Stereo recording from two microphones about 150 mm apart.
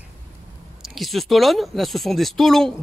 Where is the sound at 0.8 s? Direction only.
Centre (ahead or behind).